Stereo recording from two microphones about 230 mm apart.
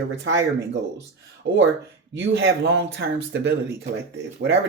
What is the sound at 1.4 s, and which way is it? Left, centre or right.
Speech, right.